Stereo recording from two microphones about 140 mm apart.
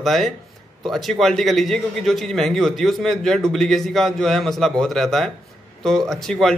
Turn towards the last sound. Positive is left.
turn(degrees=0)  # may be behind; listen again after turning